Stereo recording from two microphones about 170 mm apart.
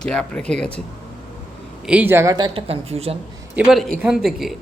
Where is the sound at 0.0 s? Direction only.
5° left (ahead or behind).